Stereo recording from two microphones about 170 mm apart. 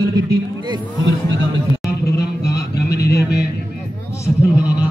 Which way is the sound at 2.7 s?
70° left (ahead or behind).